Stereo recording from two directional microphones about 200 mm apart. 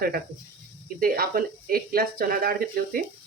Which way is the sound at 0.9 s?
50° right (ahead or behind).